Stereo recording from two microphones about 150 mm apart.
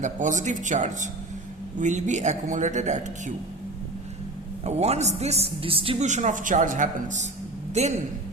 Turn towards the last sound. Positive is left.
turn(degrees=-50)  # may be behind; listen again after turning